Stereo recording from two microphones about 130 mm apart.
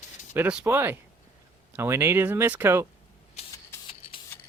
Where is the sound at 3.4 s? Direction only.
55° left (ahead or behind).